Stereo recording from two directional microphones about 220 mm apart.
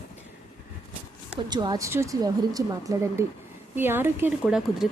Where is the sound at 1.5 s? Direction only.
20° right (ahead or behind).